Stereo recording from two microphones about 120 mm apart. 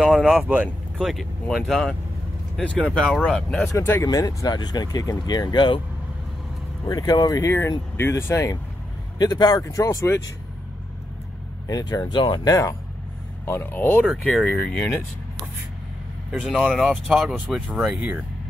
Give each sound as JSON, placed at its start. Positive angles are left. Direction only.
{"t": 0.0, "sound": "speech", "side_deg": -5}
{"t": 3.7, "sound": "speech", "side_deg": 20}
{"t": 6.9, "sound": "speech", "side_deg": 35}
{"t": 9.2, "sound": "speech", "side_deg": 35}
{"t": 11.6, "sound": "speech", "side_deg": 35}
{"t": 13.5, "sound": "speech", "side_deg": 20}
{"t": 14.0, "sound": "speech", "side_deg": 0}
{"t": 16.3, "sound": "speech", "side_deg": -5}